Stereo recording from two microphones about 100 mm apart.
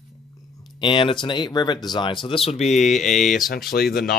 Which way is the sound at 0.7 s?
55° left (ahead or behind).